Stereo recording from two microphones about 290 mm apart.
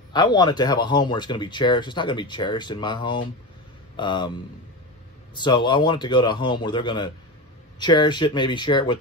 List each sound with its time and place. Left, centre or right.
0.1 s speech: centre
5.3 s speech: centre